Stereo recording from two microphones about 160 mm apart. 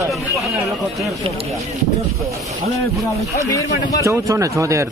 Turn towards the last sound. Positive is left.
turn(degrees=-20)  # may be behind; listen again after turning